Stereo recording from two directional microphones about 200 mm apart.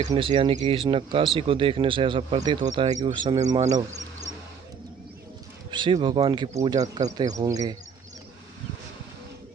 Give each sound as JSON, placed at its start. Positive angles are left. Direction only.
{"t": 0.1, "sound": "speech", "side_deg": -25}
{"t": 3.7, "sound": "speech", "side_deg": -35}
{"t": 5.7, "sound": "speech", "side_deg": -20}